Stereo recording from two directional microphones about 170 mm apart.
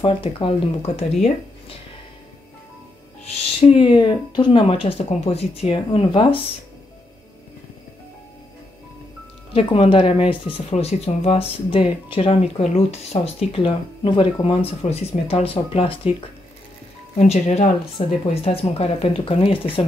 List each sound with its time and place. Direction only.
0.0 s speech: 30° left (ahead or behind)
3.3 s speech: 35° left (ahead or behind)
9.5 s speech: 30° left (ahead or behind)
17.2 s speech: 40° left (ahead or behind)